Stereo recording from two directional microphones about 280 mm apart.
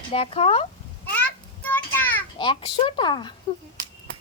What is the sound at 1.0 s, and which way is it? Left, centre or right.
Children playing, centre.